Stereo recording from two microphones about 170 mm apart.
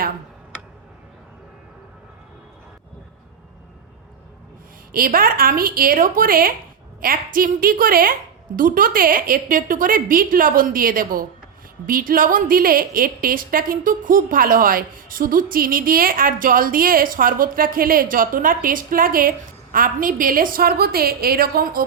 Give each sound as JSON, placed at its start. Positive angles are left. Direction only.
{"t": 4.9, "sound": "a woman's voice", "side_deg": -60}